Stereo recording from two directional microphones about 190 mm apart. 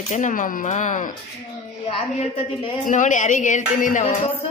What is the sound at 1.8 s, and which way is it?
A woman's voice, 30° left (ahead or behind).